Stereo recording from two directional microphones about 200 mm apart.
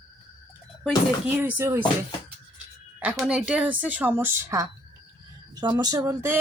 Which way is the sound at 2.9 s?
5° right (ahead or behind).